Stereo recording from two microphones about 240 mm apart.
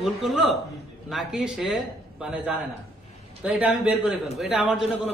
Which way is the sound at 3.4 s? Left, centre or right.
Centre.